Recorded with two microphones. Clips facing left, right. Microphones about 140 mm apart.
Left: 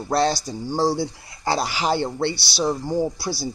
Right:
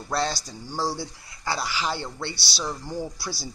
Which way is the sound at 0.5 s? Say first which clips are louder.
Left 8 dB; 25° left (ahead or behind).